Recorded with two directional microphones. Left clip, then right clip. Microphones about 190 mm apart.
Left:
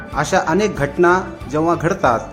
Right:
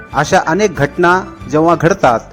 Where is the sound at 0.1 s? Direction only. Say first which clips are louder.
Right 5 dB; 30° right (ahead or behind).